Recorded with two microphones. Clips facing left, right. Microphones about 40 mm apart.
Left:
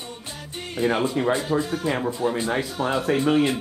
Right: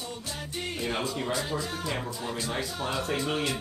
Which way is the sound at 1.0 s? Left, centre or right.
Left.